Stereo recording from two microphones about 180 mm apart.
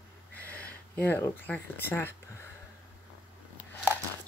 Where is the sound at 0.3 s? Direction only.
10° left (ahead or behind).